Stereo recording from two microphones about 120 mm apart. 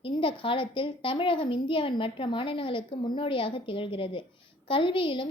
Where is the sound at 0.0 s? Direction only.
45° left (ahead or behind).